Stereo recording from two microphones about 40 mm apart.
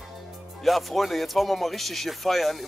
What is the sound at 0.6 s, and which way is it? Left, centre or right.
Speech, centre.